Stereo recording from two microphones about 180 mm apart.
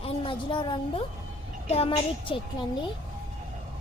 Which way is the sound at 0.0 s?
30° left (ahead or behind).